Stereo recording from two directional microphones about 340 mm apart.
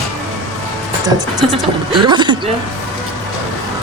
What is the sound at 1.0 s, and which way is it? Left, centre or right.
Speech, centre.